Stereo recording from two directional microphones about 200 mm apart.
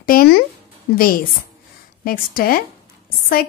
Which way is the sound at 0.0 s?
45° left (ahead or behind).